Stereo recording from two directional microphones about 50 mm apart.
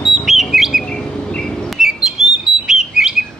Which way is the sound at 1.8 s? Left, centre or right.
Centre.